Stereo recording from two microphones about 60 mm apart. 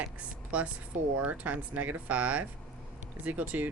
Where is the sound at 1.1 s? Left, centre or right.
Right.